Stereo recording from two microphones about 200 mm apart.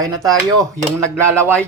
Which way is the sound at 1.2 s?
10° right (ahead or behind).